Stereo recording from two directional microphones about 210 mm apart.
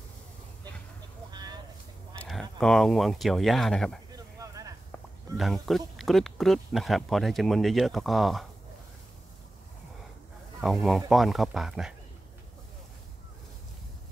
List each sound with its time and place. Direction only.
1.3 s vehicle: 20° right (ahead or behind)
2.6 s speech: centre (ahead or behind)
4.1 s a sound: 15° right (ahead or behind)
5.4 s speech: centre (ahead or behind)
10.6 s speech: centre (ahead or behind)